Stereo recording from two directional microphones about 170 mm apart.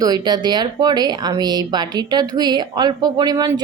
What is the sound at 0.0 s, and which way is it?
Speech, 25° right (ahead or behind).